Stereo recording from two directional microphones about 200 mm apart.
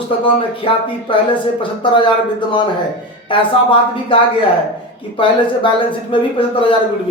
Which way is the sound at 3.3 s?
25° left (ahead or behind).